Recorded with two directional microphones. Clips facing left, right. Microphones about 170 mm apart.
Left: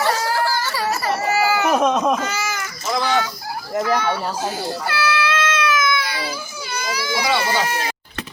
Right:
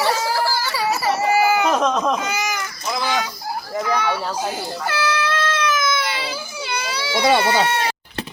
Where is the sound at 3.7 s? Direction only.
5° left (ahead or behind).